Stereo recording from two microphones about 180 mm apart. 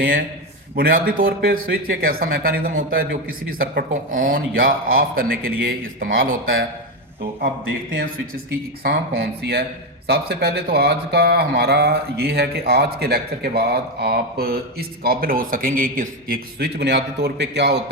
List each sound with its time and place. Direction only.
0.8 s speech: 55° right (ahead or behind)
8.8 s speech: 60° right (ahead or behind)